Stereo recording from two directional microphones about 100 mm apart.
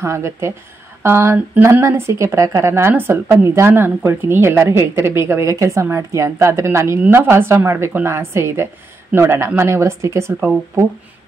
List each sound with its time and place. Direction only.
0.0 s speech: 30° right (ahead or behind)